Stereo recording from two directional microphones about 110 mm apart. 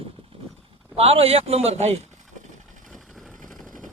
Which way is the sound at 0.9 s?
65° right (ahead or behind).